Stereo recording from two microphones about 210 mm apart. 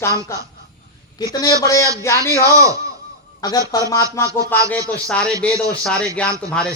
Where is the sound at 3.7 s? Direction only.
15° left (ahead or behind).